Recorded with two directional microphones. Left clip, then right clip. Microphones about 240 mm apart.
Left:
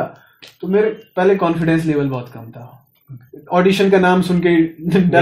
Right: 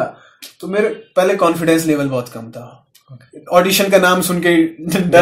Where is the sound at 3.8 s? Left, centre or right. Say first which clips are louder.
Right 2 dB; right.